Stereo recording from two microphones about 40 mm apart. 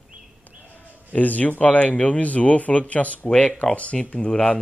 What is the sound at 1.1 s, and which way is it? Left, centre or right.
Speech, left.